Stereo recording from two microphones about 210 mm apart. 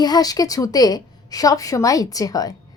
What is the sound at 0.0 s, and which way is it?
A woman's voice, 20° left (ahead or behind).